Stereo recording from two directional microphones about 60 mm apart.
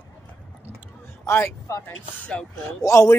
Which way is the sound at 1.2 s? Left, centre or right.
Left.